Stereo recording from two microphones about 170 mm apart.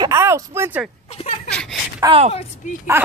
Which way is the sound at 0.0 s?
15° right (ahead or behind).